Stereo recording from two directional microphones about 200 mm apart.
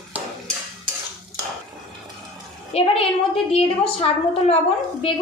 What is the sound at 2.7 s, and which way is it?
A woman's voice, 30° left (ahead or behind).